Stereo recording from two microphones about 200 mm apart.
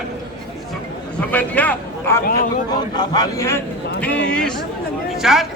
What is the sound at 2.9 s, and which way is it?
A man's voice, 20° left (ahead or behind).